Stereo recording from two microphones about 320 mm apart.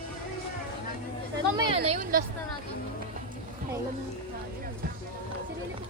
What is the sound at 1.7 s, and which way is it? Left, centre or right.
Speech, centre.